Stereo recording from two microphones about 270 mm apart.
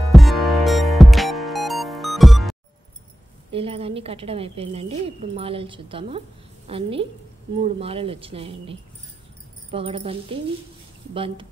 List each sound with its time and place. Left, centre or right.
0.0 s music: centre
3.5 s a woman's voice: right